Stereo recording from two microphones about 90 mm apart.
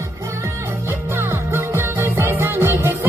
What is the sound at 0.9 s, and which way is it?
Music, 25° right (ahead or behind).